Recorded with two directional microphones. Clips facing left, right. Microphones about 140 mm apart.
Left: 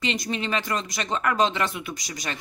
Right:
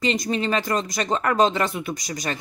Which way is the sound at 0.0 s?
40° right (ahead or behind).